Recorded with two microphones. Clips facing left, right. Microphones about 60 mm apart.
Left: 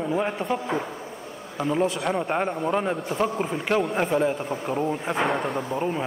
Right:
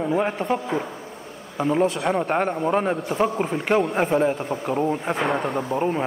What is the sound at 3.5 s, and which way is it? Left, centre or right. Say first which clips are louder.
Speech: right 3 dB; centre.